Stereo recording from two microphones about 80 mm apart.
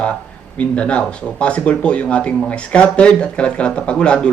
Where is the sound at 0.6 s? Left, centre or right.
Centre.